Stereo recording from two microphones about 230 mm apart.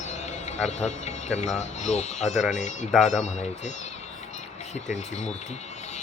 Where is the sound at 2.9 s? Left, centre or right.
Centre.